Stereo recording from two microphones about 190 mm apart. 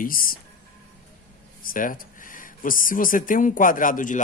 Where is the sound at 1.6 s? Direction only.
45° left (ahead or behind).